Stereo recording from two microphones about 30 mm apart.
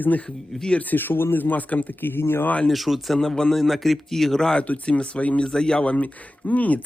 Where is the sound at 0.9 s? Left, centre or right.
Left.